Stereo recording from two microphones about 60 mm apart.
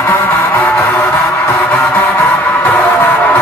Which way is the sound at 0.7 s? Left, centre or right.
Left.